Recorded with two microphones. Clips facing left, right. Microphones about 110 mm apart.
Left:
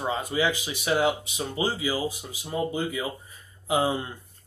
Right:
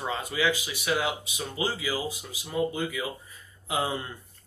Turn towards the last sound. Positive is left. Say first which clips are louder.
# left 5 dB
turn(degrees=25)  # may be behind; listen again after turning